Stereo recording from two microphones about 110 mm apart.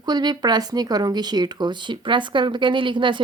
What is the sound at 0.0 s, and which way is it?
Speech, 40° right (ahead or behind).